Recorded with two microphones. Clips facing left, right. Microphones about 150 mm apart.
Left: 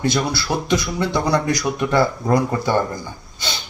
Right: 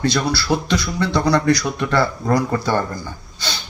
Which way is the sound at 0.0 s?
20° left (ahead or behind).